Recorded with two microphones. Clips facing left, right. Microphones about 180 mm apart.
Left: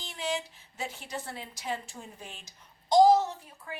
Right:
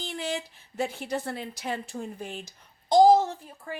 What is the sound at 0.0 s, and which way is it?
A woman's voice, 60° right (ahead or behind).